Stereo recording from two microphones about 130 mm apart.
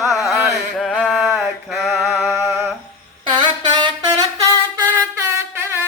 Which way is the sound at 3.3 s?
40° right (ahead or behind).